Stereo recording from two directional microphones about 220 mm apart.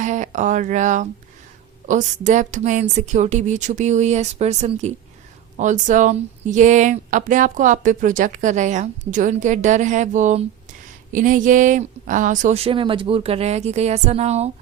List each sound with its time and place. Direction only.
0.0 s speech: 35° right (ahead or behind)